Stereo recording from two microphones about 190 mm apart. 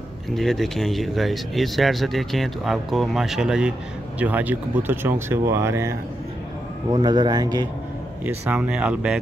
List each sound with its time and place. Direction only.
0.3 s a man's voice: centre (ahead or behind); by 7.6 s 20° right (ahead or behind)
8.5 s speech: 5° right (ahead or behind)